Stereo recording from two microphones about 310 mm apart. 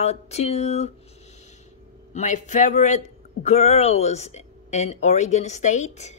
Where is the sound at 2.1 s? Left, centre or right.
Left.